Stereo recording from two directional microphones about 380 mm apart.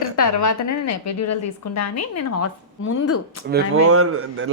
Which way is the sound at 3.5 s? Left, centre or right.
Right.